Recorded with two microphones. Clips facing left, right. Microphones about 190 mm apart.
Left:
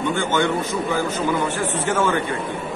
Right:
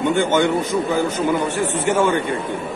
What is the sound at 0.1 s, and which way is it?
Speech, 20° right (ahead or behind).